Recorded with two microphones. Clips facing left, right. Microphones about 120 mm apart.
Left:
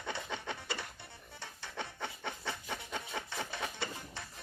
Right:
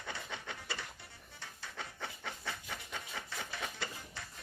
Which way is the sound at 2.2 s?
25° left (ahead or behind).